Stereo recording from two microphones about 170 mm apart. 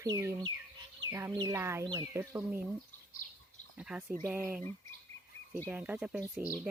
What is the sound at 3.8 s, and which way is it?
Speech, 5° right (ahead or behind).